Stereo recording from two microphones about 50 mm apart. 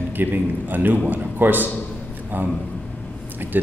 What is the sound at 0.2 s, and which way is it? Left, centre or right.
A man's voice, right.